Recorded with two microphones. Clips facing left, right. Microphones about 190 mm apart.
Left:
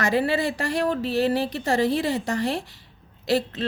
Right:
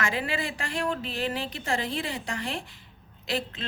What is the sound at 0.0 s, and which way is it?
Speech, 40° left (ahead or behind).